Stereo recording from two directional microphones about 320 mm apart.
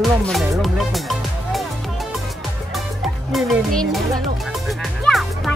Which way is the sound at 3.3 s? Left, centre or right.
Centre.